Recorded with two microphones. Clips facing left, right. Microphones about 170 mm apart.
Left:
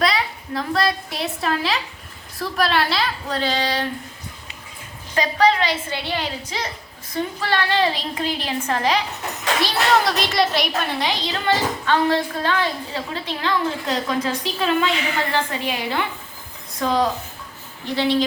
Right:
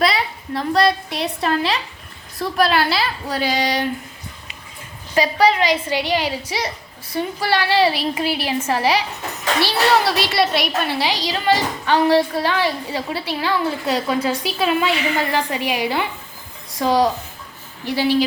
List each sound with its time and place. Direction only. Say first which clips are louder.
0.0 s a woman's voice: right 2 dB; centre (ahead or behind)
5.1 s a woman's voice: right 2 dB; 10° right (ahead or behind)